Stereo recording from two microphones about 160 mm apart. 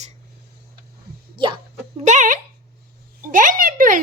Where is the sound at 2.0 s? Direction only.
50° right (ahead or behind).